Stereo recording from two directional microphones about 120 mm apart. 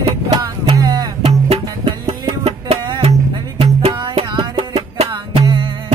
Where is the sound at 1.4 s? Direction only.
55° right (ahead or behind).